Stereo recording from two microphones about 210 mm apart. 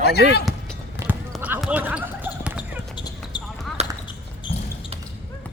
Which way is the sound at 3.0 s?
20° left (ahead or behind).